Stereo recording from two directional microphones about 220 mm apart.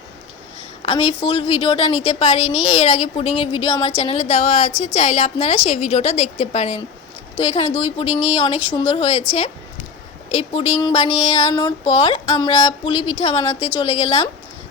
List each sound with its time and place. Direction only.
0.8 s speech: 25° left (ahead or behind)
10.2 s speech: 30° left (ahead or behind)